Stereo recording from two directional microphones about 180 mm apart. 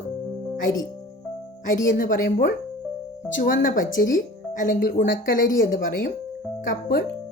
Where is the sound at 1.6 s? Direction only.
45° left (ahead or behind).